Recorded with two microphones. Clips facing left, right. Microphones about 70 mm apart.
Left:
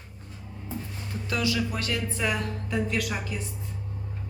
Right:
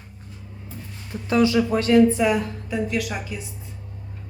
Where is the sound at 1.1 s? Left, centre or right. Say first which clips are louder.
Right 9 dB; right.